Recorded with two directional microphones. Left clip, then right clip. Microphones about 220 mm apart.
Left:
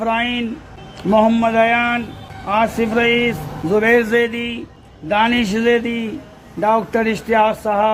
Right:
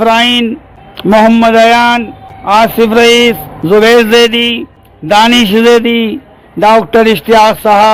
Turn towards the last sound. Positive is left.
turn(degrees=-40)  # may be behind; listen again after turning